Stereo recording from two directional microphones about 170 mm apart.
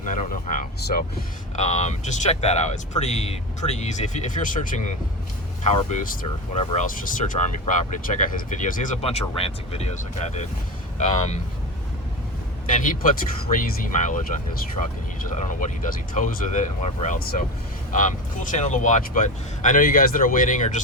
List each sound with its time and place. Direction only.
0.0 s speech: 50° left (ahead or behind)
1.5 s speech: 40° left (ahead or behind)
12.6 s speech: 50° left (ahead or behind)
15.4 s speech: 50° left (ahead or behind)